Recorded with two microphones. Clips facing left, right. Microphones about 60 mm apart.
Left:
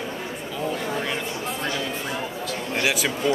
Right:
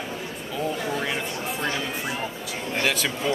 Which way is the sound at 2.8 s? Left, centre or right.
Centre.